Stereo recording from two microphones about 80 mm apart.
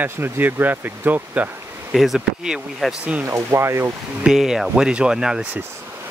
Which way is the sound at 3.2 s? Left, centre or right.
Right.